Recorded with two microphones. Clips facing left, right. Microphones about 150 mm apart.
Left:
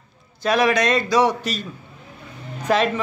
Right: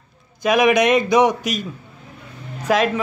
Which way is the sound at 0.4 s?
15° right (ahead or behind).